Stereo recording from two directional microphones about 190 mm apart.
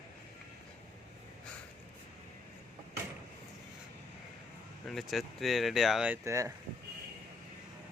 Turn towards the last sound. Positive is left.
turn(degrees=-15)  # may be behind; listen again after turning